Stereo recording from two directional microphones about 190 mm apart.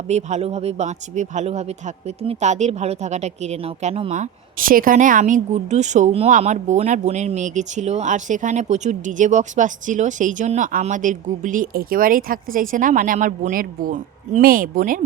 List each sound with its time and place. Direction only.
0.1 s a woman's voice: 35° right (ahead or behind)